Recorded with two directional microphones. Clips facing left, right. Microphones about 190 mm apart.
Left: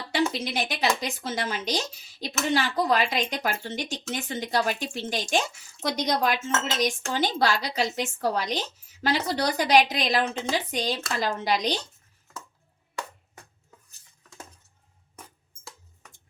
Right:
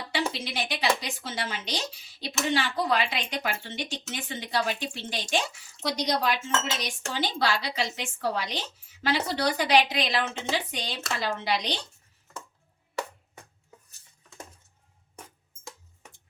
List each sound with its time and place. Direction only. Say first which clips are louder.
0.1 s speech: left 5 dB; 45° left (ahead or behind)